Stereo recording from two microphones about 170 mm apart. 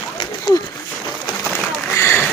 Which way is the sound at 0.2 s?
25° left (ahead or behind).